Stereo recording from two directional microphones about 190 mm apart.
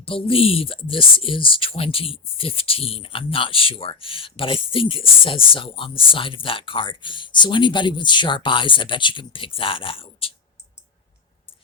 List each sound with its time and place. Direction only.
0.0 s speech: 30° left (ahead or behind)